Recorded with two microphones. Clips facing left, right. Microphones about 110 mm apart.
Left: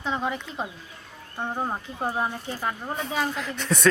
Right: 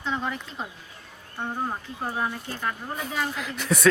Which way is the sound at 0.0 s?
15° left (ahead or behind).